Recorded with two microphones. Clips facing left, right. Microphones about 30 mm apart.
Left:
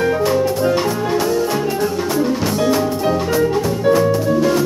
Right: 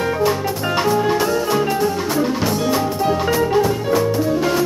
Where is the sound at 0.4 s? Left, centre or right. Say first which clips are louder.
Left 4 dB; centre.